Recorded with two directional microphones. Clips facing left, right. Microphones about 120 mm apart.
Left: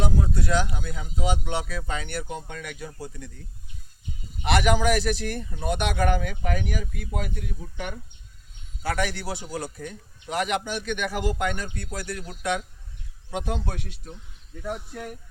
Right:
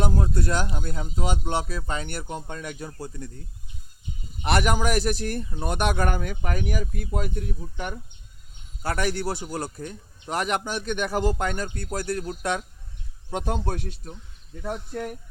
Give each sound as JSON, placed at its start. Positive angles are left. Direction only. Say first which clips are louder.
{"t": 0.0, "sound": "a man's voice", "louder": "right 1 dB", "side_deg": -50}
{"t": 4.4, "sound": "a man's voice", "louder": "left 1 dB", "side_deg": -45}